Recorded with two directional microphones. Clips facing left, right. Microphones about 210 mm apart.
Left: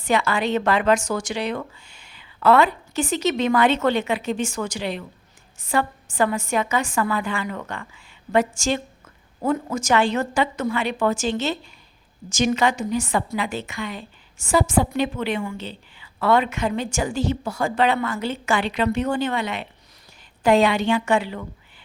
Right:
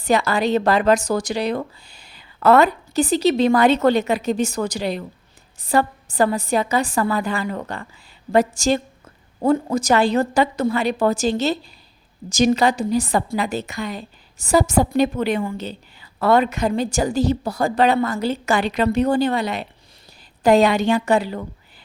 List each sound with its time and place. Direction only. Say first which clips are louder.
0.0 s a woman's voice: right 3 dB; 40° right (ahead or behind)